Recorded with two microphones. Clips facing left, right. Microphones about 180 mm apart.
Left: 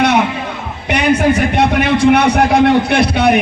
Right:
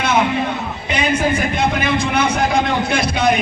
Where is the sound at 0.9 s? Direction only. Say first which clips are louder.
Left 6 dB; 70° left (ahead or behind).